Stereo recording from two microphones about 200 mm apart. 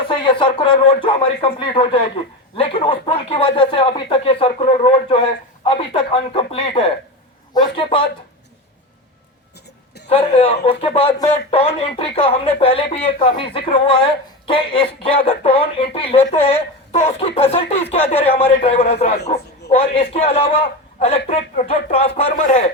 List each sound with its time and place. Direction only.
0.1 s speech: 25° left (ahead or behind)
10.1 s a man's voice: 30° left (ahead or behind)